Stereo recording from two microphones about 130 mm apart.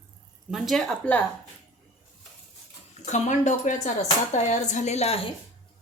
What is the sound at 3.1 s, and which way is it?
Speech, 65° left (ahead or behind).